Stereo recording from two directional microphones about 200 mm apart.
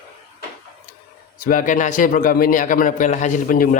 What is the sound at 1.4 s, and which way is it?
A man's voice, 45° left (ahead or behind).